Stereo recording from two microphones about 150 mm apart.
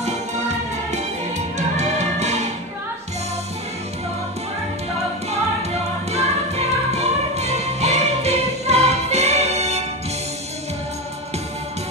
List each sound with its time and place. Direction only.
1.8 s music: 50° right (ahead or behind)
6.1 s music: 45° right (ahead or behind)